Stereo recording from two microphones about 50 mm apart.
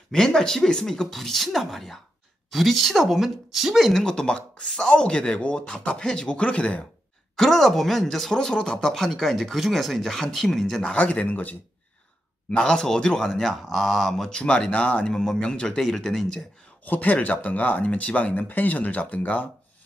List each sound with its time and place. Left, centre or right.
0.1 s speech: centre
4.0 s speech: centre
5.0 s speech: centre
7.3 s speech: centre
11.0 s speech: left
12.4 s speech: centre
14.3 s speech: centre
15.0 s speech: centre
16.8 s speech: left
18.5 s speech: left